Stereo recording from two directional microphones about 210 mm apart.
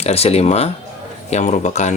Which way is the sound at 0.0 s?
30° left (ahead or behind).